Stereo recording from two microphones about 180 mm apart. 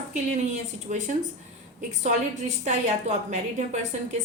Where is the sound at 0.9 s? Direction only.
45° right (ahead or behind).